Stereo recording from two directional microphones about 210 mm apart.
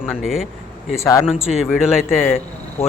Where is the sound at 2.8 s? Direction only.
10° left (ahead or behind).